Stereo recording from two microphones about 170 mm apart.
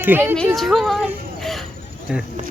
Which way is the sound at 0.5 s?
Centre (ahead or behind).